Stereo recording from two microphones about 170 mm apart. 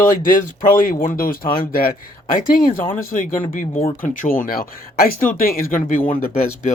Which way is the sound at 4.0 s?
55° left (ahead or behind).